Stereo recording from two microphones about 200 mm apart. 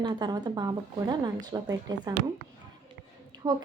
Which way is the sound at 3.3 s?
20° right (ahead or behind).